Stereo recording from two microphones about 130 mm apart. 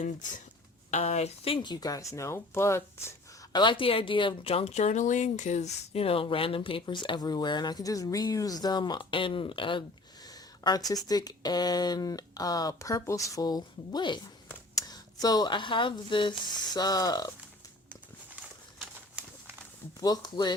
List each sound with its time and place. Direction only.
0.0 s speech: 75° left (ahead or behind)
0.9 s speech: 60° left (ahead or behind)
1.5 s speech: 35° left (ahead or behind)
3.5 s speech: 35° left (ahead or behind)
20.0 s speech: 30° left (ahead or behind)